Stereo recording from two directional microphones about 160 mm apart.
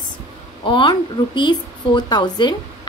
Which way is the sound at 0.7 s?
30° left (ahead or behind).